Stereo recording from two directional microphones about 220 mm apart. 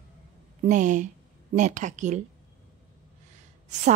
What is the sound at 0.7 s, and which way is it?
A woman's voice, 35° right (ahead or behind).